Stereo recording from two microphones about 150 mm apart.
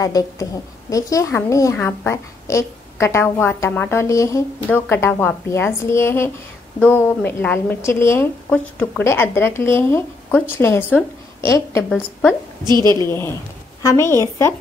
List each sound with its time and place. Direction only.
0.0 s a woman's voice: 20° left (ahead or behind)
12.6 s a woman's voice: 30° right (ahead or behind)
13.0 s a woman's voice: 15° left (ahead or behind)